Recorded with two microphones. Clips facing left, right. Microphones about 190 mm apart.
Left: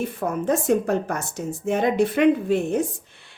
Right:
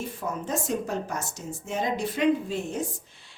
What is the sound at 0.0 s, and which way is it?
A woman's voice, 60° left (ahead or behind).